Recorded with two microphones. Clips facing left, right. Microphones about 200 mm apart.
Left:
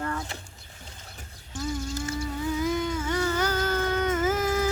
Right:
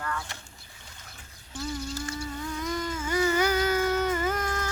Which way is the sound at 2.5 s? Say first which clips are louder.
Left 6 dB; 5° left (ahead or behind).